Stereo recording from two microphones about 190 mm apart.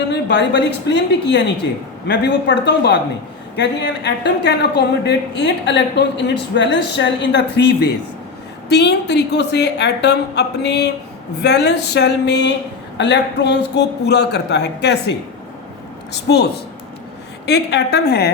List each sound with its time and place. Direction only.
0.1 s a woman's voice: 65° left (ahead or behind)
16.1 s a woman's voice: 60° left (ahead or behind)